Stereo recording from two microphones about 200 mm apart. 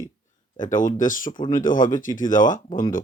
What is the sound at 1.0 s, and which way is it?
Speech, 40° left (ahead or behind).